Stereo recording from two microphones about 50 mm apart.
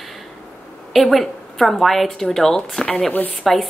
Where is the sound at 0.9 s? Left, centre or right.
Centre.